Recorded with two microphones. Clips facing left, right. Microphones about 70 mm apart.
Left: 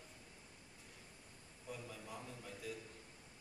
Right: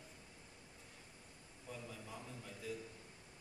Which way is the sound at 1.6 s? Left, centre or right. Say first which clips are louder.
Left 1 dB; centre.